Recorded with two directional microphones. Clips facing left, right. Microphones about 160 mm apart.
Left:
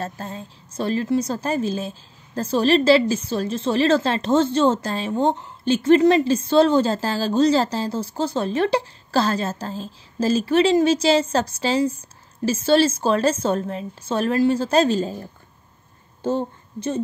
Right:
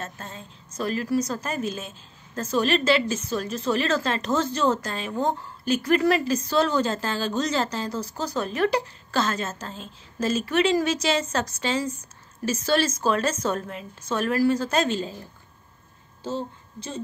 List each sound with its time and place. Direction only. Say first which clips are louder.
0.0 s a woman's voice: left 7 dB; 35° left (ahead or behind)
16.2 s a woman's voice: left 7 dB; 55° left (ahead or behind)